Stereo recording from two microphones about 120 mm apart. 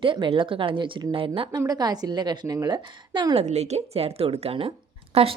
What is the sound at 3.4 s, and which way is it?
A woman's voice, 65° right (ahead or behind).